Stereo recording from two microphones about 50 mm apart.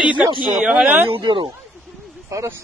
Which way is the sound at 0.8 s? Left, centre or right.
Right.